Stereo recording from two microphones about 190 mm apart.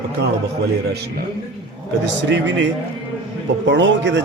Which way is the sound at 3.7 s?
70° right (ahead or behind).